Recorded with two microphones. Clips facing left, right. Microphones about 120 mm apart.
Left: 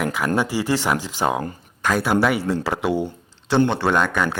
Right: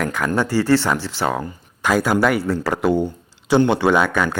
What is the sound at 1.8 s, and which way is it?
Speech, 5° right (ahead or behind).